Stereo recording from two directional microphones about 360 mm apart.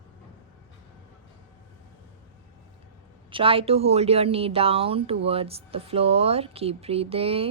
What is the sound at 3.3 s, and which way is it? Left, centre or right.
Speech, centre.